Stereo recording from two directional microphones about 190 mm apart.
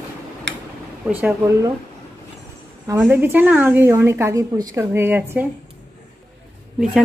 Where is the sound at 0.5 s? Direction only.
65° right (ahead or behind).